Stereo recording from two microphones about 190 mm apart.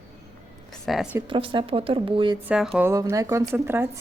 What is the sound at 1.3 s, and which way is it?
A woman's voice, 25° right (ahead or behind).